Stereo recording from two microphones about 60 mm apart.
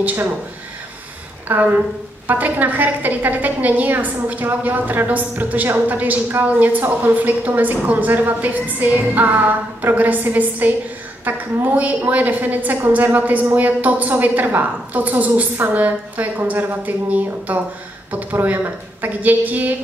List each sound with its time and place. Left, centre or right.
0.0 s speech: right
1.5 s a woman's voice: right